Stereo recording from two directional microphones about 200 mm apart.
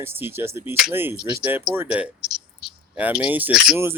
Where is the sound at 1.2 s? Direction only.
20° right (ahead or behind).